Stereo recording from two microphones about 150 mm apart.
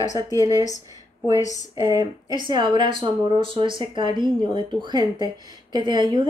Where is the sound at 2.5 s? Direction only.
30° right (ahead or behind).